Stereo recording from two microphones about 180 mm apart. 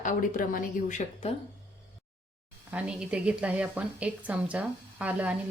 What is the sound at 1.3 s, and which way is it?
Speech, 35° left (ahead or behind).